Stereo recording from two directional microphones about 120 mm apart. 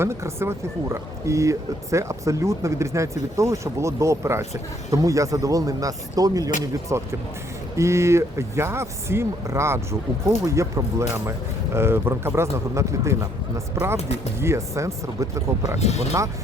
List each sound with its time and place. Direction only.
0.0 s speech: 20° right (ahead or behind)
15.8 s speech: 65° left (ahead or behind)